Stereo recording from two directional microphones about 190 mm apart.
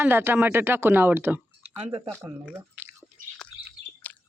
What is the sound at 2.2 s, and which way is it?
Drip, 5° right (ahead or behind).